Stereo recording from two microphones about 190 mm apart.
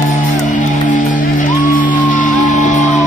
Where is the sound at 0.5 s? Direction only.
40° left (ahead or behind).